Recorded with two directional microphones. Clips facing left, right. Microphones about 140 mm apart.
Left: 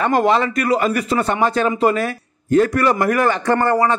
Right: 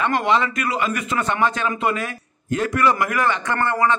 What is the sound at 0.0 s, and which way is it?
A man's voice, 40° left (ahead or behind).